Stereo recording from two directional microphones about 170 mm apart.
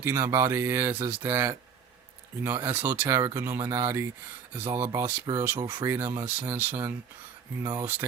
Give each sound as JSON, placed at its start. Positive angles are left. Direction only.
{"t": 0.0, "sound": "speech", "side_deg": -15}